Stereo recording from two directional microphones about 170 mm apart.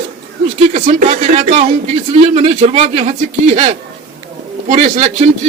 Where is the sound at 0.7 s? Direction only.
40° right (ahead or behind).